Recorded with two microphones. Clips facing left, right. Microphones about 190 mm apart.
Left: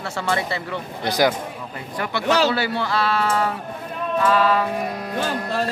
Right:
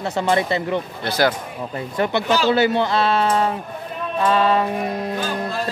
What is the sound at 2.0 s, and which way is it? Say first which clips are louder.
Speech: right 1 dB; 25° right (ahead or behind).